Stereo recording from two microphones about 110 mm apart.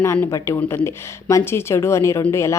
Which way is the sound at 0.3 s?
30° left (ahead or behind).